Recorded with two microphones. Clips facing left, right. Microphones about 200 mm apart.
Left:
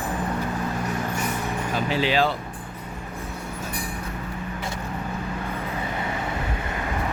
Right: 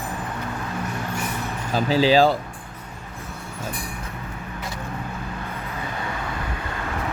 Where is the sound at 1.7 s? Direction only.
35° right (ahead or behind).